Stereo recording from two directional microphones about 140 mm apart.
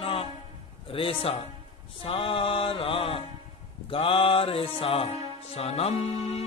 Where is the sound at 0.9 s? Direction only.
40° left (ahead or behind).